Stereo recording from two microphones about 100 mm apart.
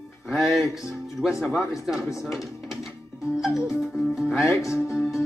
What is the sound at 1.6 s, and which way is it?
Speech, 30° left (ahead or behind).